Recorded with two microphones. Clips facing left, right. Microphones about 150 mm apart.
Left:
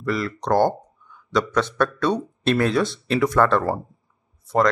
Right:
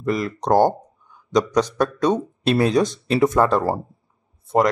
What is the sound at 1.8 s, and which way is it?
Speech, 15° right (ahead or behind).